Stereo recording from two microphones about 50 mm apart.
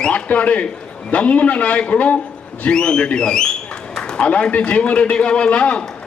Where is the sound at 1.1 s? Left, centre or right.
Left.